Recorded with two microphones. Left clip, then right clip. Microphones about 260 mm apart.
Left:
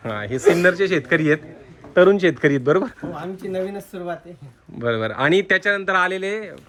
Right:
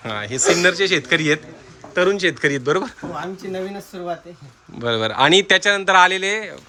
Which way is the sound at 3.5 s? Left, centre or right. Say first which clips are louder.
Left 2 dB; centre.